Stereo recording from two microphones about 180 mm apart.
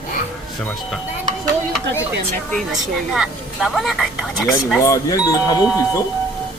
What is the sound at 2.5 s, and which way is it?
Speech, centre (ahead or behind).